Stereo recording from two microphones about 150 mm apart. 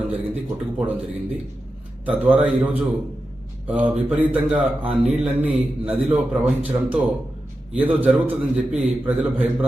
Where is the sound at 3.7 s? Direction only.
10° right (ahead or behind).